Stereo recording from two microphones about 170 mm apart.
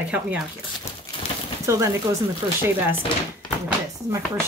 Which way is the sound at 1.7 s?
15° right (ahead or behind).